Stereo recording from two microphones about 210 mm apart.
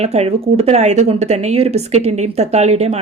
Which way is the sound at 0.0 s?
30° right (ahead or behind).